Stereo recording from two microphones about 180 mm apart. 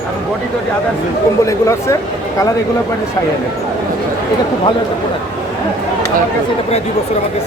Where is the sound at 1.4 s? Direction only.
15° left (ahead or behind).